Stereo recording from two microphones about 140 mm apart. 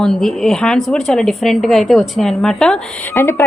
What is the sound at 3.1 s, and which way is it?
Speech, 15° left (ahead or behind).